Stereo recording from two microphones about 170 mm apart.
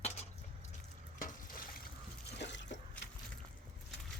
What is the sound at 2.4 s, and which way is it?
Liquid, 90° left.